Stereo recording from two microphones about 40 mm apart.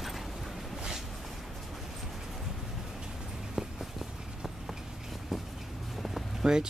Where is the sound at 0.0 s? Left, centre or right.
Centre.